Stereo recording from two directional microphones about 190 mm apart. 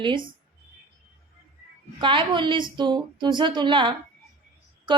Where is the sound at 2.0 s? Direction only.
25° right (ahead or behind).